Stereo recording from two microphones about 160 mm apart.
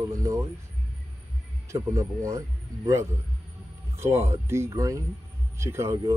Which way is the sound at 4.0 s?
15° right (ahead or behind).